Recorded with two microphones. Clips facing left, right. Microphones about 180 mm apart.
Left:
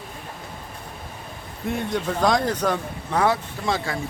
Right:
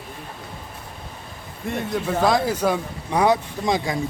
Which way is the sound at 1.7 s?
Centre (ahead or behind).